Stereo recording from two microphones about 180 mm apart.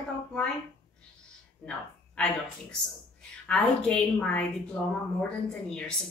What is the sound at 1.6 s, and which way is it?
Speech, 5° left (ahead or behind).